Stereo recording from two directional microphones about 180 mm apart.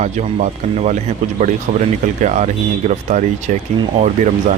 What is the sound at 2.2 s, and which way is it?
Speech, 40° right (ahead or behind).